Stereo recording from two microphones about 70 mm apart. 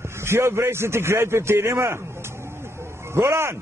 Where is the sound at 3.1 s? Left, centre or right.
Right.